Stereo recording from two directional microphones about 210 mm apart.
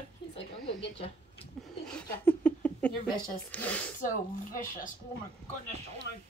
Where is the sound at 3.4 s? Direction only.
5° left (ahead or behind).